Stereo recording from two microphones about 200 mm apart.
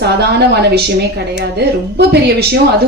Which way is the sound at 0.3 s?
55° right (ahead or behind).